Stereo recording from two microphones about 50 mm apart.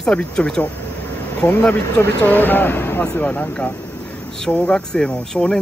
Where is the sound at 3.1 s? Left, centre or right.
Left.